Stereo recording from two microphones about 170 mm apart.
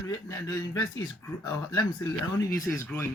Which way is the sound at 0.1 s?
20° left (ahead or behind).